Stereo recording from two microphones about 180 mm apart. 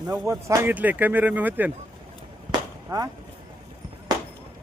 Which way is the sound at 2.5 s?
20° right (ahead or behind).